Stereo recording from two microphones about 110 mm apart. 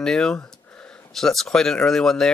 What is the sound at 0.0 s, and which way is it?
Speech, 5° left (ahead or behind).